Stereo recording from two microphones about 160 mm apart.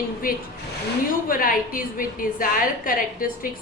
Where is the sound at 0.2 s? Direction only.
60° left (ahead or behind).